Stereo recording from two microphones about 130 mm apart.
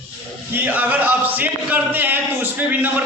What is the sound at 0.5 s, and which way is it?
Speech, 15° right (ahead or behind).